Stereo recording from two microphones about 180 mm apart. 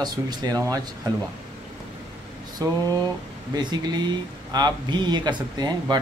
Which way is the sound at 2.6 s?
20° right (ahead or behind).